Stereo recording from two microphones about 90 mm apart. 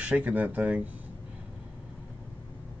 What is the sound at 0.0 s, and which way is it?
Speech, 15° right (ahead or behind).